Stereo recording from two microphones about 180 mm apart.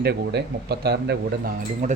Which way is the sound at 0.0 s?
65° right (ahead or behind).